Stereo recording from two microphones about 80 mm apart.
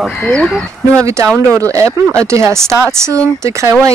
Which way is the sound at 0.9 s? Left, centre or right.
Right.